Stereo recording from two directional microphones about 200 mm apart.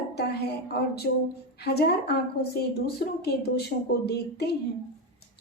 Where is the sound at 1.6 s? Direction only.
55° left (ahead or behind).